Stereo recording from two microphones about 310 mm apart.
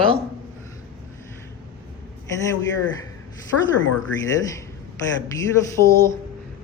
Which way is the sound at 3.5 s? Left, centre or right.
Left.